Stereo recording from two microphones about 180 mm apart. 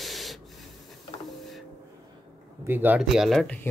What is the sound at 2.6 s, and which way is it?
Speech, 10° right (ahead or behind).